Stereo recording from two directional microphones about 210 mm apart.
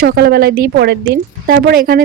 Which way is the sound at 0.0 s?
50° right (ahead or behind).